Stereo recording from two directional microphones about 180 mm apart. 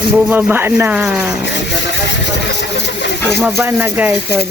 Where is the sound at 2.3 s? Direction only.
75° left (ahead or behind).